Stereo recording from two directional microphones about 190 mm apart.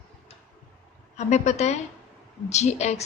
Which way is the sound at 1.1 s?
35° left (ahead or behind).